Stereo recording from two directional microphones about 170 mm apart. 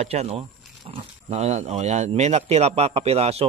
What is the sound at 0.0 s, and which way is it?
A man's voice, 40° right (ahead or behind).